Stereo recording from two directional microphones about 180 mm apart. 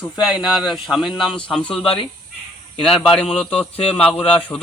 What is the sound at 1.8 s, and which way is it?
Speech, 30° left (ahead or behind).